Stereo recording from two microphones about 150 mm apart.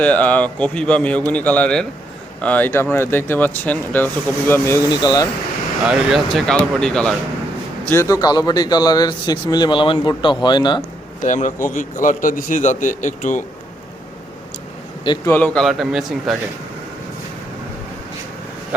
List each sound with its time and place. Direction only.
0.0 s speech: 10° left (ahead or behind)
5.8 s speech: 5° right (ahead or behind)
7.9 s speech: 20° left (ahead or behind)
11.2 s a man's voice: 55° left (ahead or behind)
15.2 s speech: 10° left (ahead or behind)
15.6 s speech: centre (ahead or behind)